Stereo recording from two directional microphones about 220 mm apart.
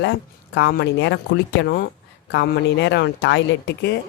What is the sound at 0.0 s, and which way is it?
Speech, 50° left (ahead or behind).